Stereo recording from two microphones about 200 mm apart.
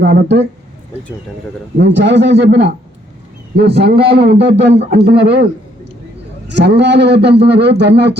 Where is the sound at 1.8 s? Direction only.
60° right (ahead or behind).